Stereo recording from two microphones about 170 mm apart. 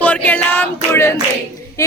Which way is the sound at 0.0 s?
10° left (ahead or behind).